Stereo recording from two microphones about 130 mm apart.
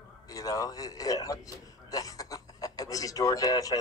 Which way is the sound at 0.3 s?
25° left (ahead or behind).